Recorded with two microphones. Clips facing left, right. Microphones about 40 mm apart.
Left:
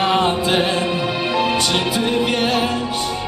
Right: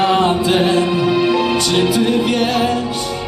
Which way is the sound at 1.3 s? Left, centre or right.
Centre.